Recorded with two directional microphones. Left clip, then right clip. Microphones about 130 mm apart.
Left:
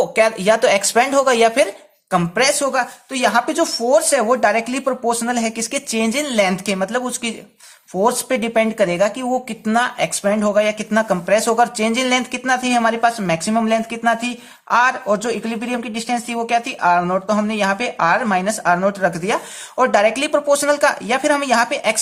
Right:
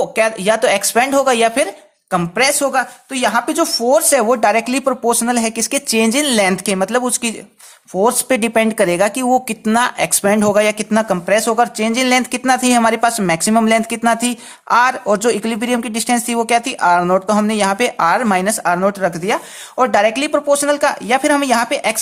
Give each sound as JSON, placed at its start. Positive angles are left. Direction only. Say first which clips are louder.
{"t": 0.0, "sound": "speech", "louder": "even", "side_deg": -20}
{"t": 12.0, "sound": "speech", "louder": "right 4 dB", "side_deg": -40}